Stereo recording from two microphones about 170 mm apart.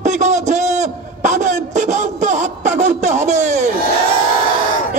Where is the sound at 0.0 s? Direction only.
45° right (ahead or behind).